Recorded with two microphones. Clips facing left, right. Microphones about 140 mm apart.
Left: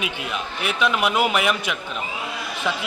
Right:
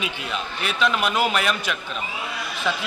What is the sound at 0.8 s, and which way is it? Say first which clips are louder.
A man's voice: left 1 dB; 15° left (ahead or behind).